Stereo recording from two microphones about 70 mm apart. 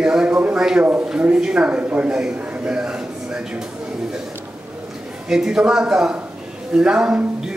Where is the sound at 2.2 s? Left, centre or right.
Centre.